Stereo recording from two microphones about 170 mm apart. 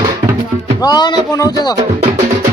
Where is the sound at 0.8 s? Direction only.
25° left (ahead or behind).